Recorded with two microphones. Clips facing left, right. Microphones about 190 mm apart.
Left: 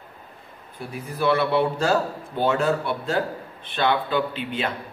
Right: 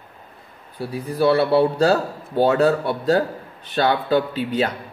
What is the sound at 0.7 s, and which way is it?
Speech, 35° right (ahead or behind).